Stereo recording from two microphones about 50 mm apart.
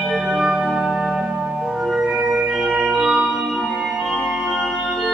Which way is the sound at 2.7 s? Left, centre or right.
Centre.